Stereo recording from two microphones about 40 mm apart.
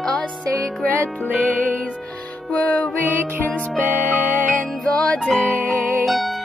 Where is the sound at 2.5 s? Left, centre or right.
Left.